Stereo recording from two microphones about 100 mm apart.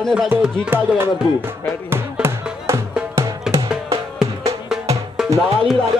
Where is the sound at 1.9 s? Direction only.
25° right (ahead or behind).